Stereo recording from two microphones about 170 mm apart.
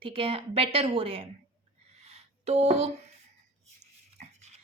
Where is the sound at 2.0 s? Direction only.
40° right (ahead or behind).